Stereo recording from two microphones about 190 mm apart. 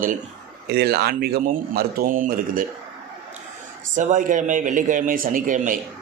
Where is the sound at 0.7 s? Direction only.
55° right (ahead or behind).